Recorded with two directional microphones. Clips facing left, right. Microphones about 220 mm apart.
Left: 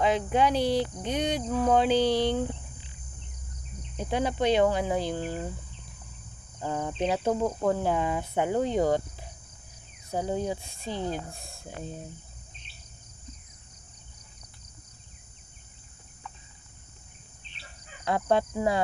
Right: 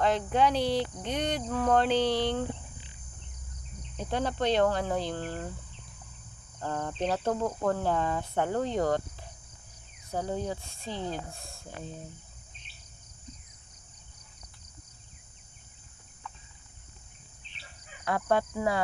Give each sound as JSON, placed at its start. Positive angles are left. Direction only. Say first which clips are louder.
{"t": 0.0, "sound": "speech", "louder": "left 1 dB", "side_deg": 5}
{"t": 3.9, "sound": "speech", "louder": "left 3 dB", "side_deg": 10}
{"t": 6.6, "sound": "speech", "louder": "left 2 dB", "side_deg": 10}
{"t": 10.1, "sound": "speech", "louder": "left 3 dB", "side_deg": 15}
{"t": 18.0, "sound": "speech", "louder": "left 2 dB", "side_deg": 25}